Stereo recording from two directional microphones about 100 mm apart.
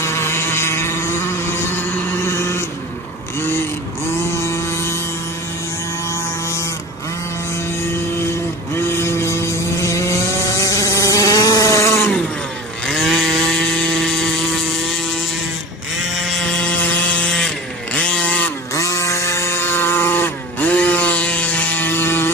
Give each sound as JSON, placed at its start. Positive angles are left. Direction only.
{"t": 0.0, "sound": "vehicle", "side_deg": 25}
{"t": 2.2, "sound": "vehicle", "side_deg": 25}
{"t": 4.4, "sound": "a sound", "side_deg": 25}
{"t": 6.1, "sound": "vehicle", "side_deg": 30}
{"t": 8.7, "sound": "chainsaw", "side_deg": 25}
{"t": 12.8, "sound": "chainsaw", "side_deg": 0}
{"t": 16.0, "sound": "a sound", "side_deg": 0}
{"t": 18.7, "sound": "chainsaw", "side_deg": 30}